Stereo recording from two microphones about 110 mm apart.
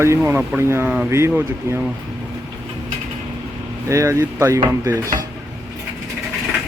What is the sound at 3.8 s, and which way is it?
Speech, 30° right (ahead or behind).